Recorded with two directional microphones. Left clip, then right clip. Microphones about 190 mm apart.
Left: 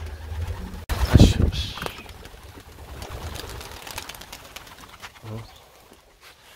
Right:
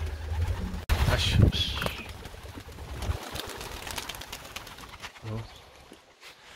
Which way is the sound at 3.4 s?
15° left (ahead or behind).